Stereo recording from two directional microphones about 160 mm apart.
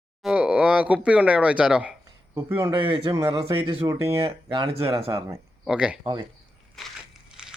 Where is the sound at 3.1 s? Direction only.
25° right (ahead or behind).